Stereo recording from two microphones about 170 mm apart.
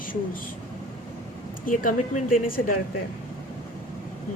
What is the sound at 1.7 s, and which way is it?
Speech, 55° left (ahead or behind).